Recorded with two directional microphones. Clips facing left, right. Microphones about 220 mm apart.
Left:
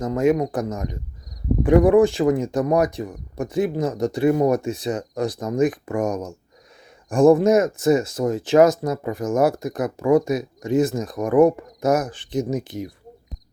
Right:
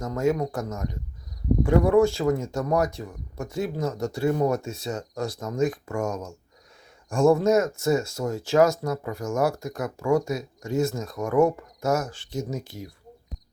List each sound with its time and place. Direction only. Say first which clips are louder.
0.0 s speech: left 5 dB; 15° left (ahead or behind)